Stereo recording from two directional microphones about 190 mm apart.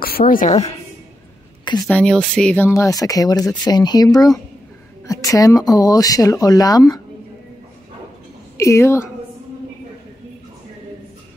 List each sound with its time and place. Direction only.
0.3 s a woman's voice: 40° left (ahead or behind)
1.6 s a sound: 25° left (ahead or behind)
1.9 s speech: 5° left (ahead or behind)
8.5 s a woman's voice: 15° left (ahead or behind)